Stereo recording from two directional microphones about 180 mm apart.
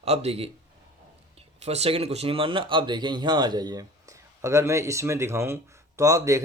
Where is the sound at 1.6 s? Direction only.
35° right (ahead or behind).